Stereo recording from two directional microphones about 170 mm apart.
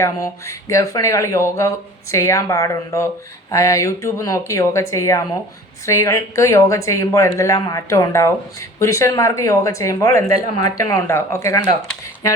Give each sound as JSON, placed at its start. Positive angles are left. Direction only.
{"t": 0.0, "sound": "speech", "side_deg": 20}